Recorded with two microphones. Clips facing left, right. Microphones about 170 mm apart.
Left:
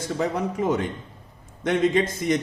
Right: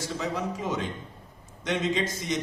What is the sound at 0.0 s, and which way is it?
A man's voice, 55° left (ahead or behind).